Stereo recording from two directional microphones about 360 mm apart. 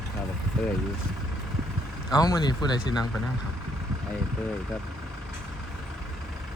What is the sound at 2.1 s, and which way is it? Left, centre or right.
Speech, centre.